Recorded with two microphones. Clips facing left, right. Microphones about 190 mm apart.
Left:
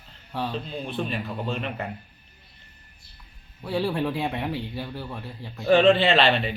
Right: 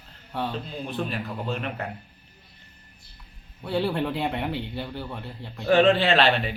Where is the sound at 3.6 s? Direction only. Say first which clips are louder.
Even; centre (ahead or behind).